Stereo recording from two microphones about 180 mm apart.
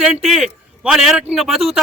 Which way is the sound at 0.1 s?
Centre (ahead or behind).